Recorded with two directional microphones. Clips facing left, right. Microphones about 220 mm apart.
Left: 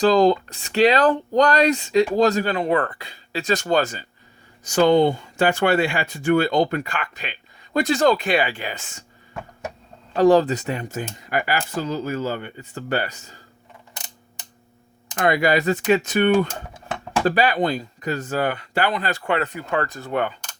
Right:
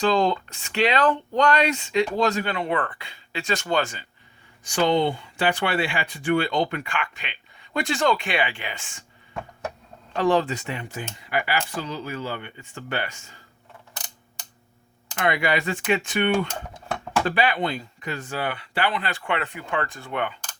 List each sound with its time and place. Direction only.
0.0 s speech: 35° left (ahead or behind)
10.2 s speech: 40° left (ahead or behind)
15.1 s speech: 40° left (ahead or behind)